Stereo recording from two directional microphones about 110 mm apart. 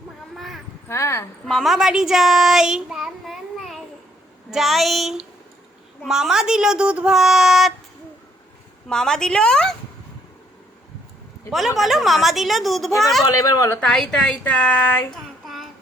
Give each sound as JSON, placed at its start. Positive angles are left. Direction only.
{"t": 0.3, "sound": "a sound", "side_deg": 0}
{"t": 0.9, "sound": "a woman's voice", "side_deg": 25}
{"t": 1.5, "sound": "a child's voice", "side_deg": 0}
{"t": 8.9, "sound": "a woman's voice", "side_deg": 5}
{"t": 11.8, "sound": "a woman's voice", "side_deg": 0}
{"t": 13.3, "sound": "speech", "side_deg": 30}
{"t": 13.7, "sound": "a woman's voice", "side_deg": 5}
{"t": 15.4, "sound": "child singing", "side_deg": 0}